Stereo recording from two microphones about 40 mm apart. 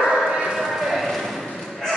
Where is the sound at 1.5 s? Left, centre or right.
Centre.